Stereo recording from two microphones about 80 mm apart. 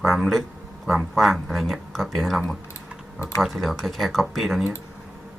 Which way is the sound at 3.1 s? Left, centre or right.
Left.